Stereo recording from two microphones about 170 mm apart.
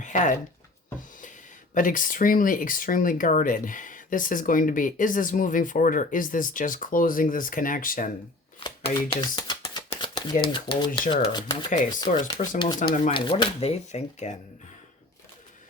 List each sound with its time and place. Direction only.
0.0 s speech: 45° left (ahead or behind)
1.7 s speech: 50° left (ahead or behind)
8.6 s speech: 30° left (ahead or behind)